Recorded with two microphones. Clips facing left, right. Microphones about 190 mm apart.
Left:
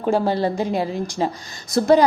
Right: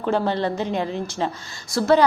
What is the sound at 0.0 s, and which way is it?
A woman's voice, 10° left (ahead or behind).